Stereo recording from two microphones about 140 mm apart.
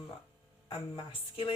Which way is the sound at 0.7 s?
40° left (ahead or behind).